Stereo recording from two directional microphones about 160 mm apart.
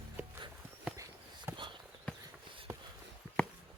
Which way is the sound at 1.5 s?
30° right (ahead or behind).